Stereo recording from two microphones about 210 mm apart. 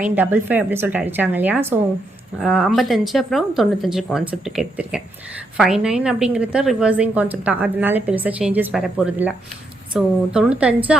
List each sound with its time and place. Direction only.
0.1 s a woman's voice: 10° right (ahead or behind)